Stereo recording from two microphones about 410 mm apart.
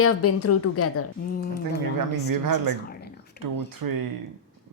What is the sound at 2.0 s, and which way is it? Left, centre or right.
Speech, right.